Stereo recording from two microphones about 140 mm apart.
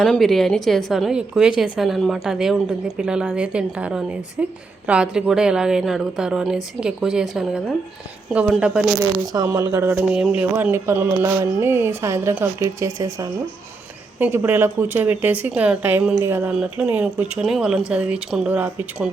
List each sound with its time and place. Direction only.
0.0 s a woman's voice: centre (ahead or behind)
9.3 s speech: 25° right (ahead or behind); by 19.1 s 10° right (ahead or behind)